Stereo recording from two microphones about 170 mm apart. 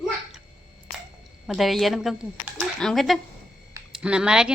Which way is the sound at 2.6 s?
Centre (ahead or behind).